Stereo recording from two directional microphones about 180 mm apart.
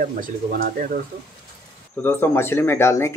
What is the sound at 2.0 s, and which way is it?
Speech, 10° left (ahead or behind).